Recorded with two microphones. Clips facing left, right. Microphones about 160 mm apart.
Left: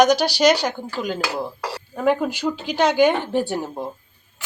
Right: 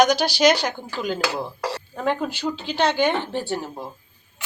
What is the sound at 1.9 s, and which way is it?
A woman's voice, 5° left (ahead or behind).